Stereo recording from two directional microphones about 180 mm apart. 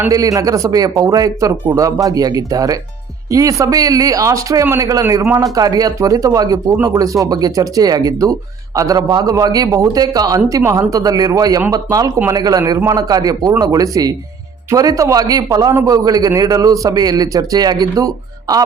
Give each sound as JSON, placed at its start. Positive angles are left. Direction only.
{"t": 0.0, "sound": "speech", "side_deg": -20}